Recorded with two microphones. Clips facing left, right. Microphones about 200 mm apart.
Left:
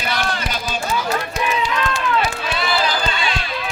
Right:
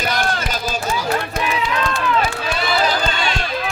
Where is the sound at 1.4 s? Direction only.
55° right (ahead or behind).